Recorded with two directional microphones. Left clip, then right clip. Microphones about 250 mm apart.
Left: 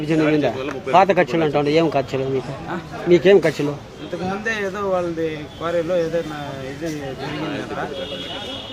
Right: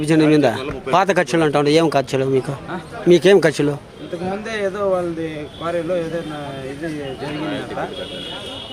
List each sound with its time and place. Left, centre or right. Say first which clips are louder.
0.0 s a man's voice: right 4 dB; right
4.4 s speech: right 3 dB; centre